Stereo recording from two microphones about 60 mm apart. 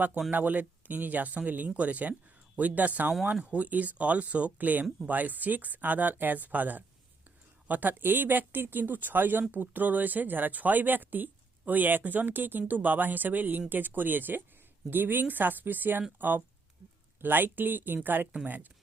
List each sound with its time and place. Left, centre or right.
0.3 s speech: right